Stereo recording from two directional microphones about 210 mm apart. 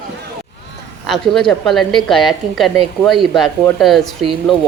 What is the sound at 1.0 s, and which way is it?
Speech, centre (ahead or behind).